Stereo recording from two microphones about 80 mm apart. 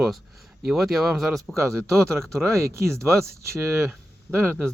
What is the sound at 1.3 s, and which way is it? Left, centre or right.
Speech, right.